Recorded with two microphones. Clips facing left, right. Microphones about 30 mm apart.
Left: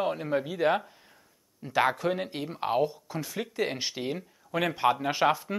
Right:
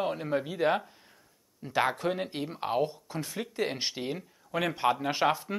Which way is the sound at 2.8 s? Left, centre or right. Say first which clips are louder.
Left 2 dB; centre.